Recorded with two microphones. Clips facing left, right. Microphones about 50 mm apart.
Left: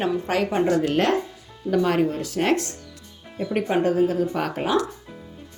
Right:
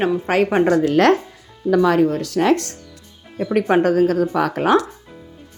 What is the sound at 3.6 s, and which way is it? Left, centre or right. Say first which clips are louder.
Speech: right 5 dB; right.